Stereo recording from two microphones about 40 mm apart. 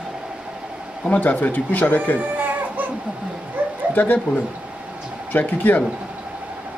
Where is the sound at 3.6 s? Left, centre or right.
Right.